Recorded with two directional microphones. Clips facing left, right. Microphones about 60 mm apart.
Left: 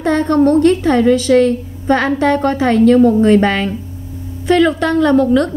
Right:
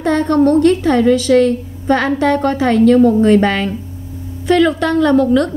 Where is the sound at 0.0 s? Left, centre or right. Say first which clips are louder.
Even; left.